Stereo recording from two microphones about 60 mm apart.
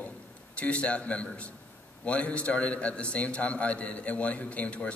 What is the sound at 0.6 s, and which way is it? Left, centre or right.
A man's voice, left.